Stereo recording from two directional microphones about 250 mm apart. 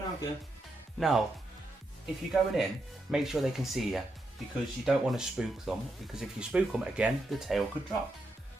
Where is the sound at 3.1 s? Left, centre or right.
Centre.